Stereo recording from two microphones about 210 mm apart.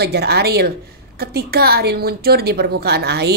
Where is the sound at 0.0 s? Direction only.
50° right (ahead or behind).